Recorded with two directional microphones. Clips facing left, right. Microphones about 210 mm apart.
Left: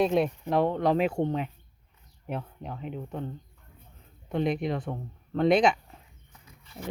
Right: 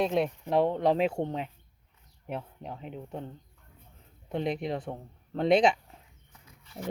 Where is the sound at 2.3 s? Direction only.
30° right (ahead or behind).